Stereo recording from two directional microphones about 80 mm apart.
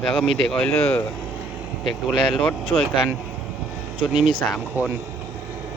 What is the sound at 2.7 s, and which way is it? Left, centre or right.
Speech, left.